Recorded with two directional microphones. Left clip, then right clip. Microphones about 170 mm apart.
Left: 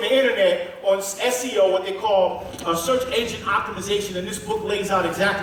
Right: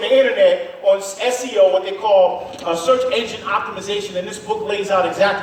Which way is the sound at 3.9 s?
25° left (ahead or behind).